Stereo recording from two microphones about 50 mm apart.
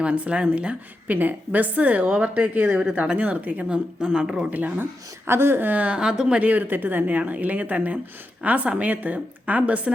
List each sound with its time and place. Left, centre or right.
0.0 s speech: right
1.0 s speech: right
2.0 s speech: centre
4.5 s speech: right
5.2 s speech: right
6.0 s speech: centre
6.4 s speech: right